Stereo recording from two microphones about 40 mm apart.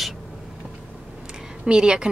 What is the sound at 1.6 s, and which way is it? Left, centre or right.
Speech, right.